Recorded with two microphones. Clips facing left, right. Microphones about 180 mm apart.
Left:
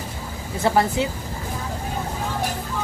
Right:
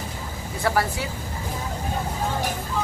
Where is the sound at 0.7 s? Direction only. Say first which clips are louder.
Left 4 dB; 20° left (ahead or behind).